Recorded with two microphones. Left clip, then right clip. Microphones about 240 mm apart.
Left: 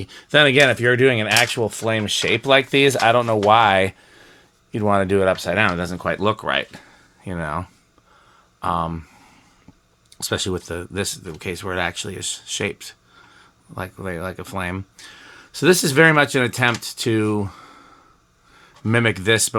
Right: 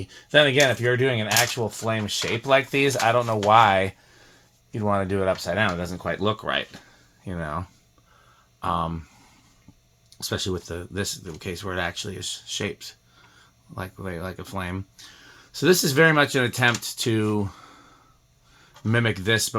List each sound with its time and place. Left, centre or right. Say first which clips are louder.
0.0 s speech: left 3 dB; left
10.1 s speech: left 5 dB; left